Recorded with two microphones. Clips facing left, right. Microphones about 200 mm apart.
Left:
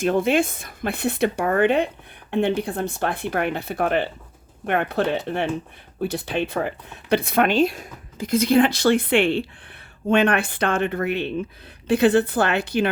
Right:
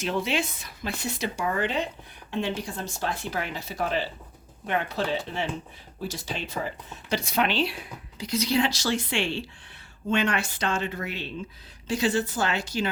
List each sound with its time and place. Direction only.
0.0 s speech: 50° left (ahead or behind)